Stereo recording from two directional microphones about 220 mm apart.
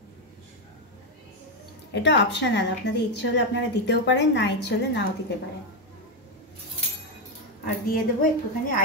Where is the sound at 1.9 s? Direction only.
55° left (ahead or behind).